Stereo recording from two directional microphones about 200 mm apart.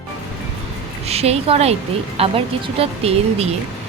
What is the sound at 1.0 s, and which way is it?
Speech, 30° right (ahead or behind).